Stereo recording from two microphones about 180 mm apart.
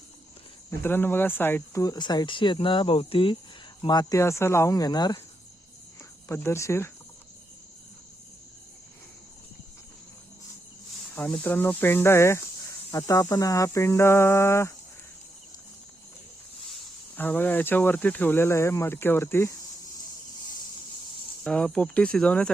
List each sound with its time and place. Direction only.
0.8 s speech: 10° left (ahead or behind)
6.2 s speech: 15° left (ahead or behind)
11.1 s speech: 10° left (ahead or behind)
17.2 s speech: 10° left (ahead or behind)
21.4 s speech: 5° left (ahead or behind)